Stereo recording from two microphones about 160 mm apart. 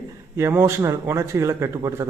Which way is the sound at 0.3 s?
15° right (ahead or behind).